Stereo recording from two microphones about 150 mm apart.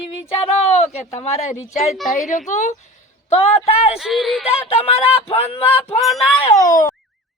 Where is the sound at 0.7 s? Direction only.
50° left (ahead or behind).